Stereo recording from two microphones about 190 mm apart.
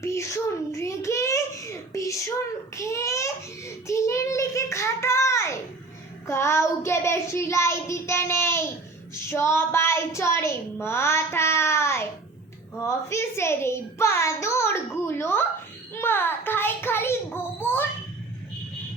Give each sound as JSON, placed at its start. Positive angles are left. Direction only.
{"t": 0.0, "sound": "a child's voice", "side_deg": 15}